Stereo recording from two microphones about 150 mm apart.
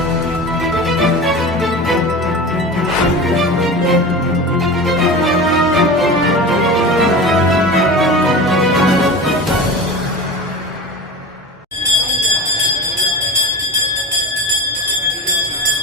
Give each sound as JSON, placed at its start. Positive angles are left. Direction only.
{"t": 0.6, "sound": "music", "side_deg": 0}